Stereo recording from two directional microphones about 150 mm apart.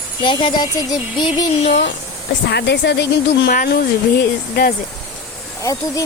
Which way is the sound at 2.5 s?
90° left.